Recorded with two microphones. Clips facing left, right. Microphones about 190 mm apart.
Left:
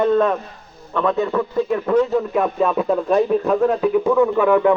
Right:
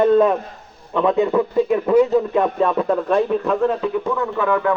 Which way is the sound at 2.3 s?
5° left (ahead or behind).